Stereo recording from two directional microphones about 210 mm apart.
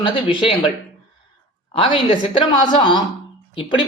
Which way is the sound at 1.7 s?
25° left (ahead or behind).